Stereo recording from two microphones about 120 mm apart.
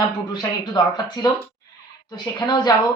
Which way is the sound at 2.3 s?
35° left (ahead or behind).